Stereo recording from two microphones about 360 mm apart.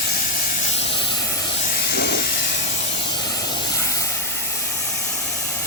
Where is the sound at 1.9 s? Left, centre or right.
Left.